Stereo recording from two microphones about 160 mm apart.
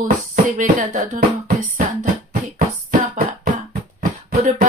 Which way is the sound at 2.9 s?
60° right (ahead or behind).